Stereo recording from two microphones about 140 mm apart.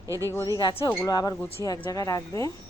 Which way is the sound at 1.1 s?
30° left (ahead or behind).